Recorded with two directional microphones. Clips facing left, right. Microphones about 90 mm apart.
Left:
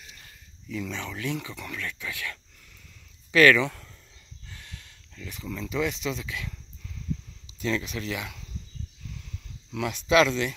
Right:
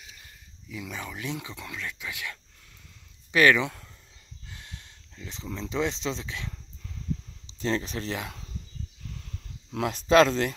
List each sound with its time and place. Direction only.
0.7 s speech: 10° right (ahead or behind); by 6.5 s 30° right (ahead or behind)
7.5 s speech: 35° right (ahead or behind)
9.7 s speech: 40° right (ahead or behind)